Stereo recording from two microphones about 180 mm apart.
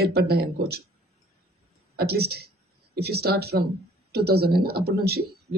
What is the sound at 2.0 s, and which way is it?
A man's voice, 60° right (ahead or behind).